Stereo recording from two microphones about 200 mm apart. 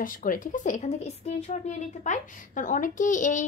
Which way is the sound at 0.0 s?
45° left (ahead or behind).